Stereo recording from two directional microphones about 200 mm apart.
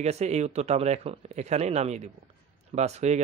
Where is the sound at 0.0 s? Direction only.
35° right (ahead or behind).